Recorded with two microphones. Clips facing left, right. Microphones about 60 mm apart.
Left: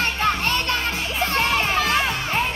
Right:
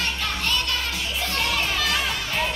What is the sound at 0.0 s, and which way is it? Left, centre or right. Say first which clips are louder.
Music: left 6 dB; left.